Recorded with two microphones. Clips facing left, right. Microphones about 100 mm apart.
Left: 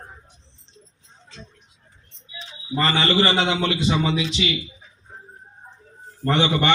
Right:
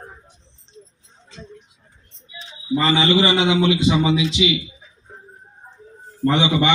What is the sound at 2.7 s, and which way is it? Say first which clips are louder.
A man's voice: right 3 dB; 15° right (ahead or behind).